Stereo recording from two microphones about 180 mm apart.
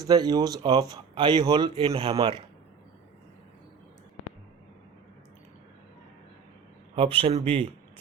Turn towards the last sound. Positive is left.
turn(degrees=-35)  # may be behind; listen again after turning